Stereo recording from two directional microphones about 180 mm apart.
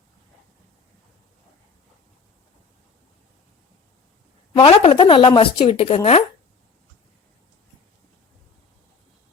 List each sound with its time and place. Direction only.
4.5 s a woman's voice: 30° left (ahead or behind)